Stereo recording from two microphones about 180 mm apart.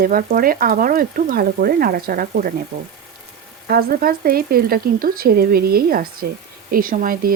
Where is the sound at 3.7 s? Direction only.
55° right (ahead or behind).